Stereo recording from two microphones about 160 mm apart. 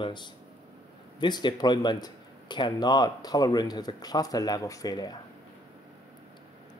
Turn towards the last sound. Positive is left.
turn(degrees=25)  # may be behind; listen again after turning